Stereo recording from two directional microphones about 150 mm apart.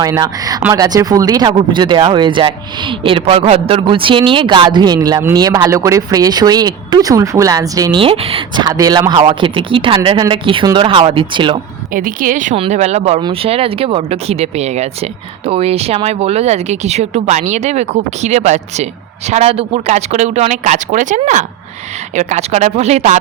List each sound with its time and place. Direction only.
0.0 s speech: 25° right (ahead or behind)
8.0 s speech: 40° right (ahead or behind)
11.9 s speech: 65° right (ahead or behind)
12.7 s speech: 50° right (ahead or behind)